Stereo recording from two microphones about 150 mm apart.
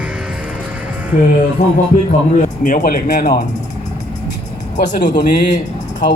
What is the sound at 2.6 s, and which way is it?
Speech, 65° left (ahead or behind).